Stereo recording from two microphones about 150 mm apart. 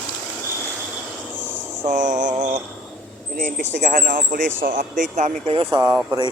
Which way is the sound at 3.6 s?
55° right (ahead or behind).